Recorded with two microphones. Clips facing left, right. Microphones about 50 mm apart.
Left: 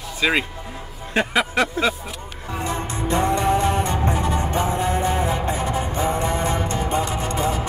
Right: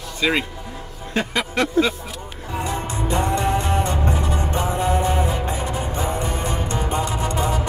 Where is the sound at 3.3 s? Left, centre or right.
Left.